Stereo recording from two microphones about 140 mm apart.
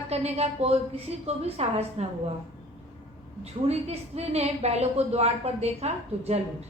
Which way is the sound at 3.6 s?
50° right (ahead or behind).